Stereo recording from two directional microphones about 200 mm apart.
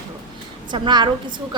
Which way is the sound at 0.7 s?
20° right (ahead or behind).